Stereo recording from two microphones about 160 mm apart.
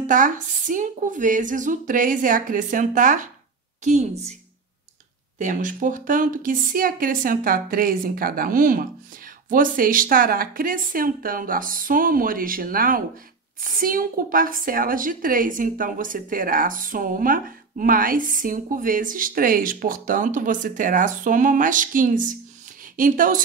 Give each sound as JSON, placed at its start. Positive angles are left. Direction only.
{"t": 0.0, "sound": "a woman's voice", "side_deg": -55}
{"t": 5.4, "sound": "a woman's voice", "side_deg": -55}